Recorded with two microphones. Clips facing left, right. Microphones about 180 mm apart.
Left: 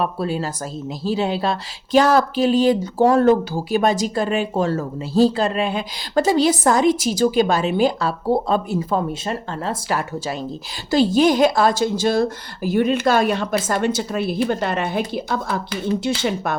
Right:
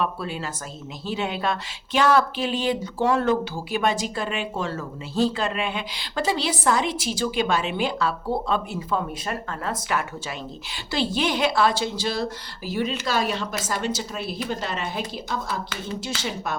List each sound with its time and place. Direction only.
0.0 s speech: 40° left (ahead or behind)
9.2 s a woman's voice: 30° left (ahead or behind); by 16.6 s 60° left (ahead or behind)